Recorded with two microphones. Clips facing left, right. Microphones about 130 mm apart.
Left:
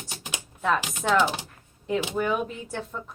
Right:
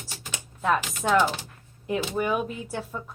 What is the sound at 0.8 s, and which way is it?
Speech, 20° left (ahead or behind).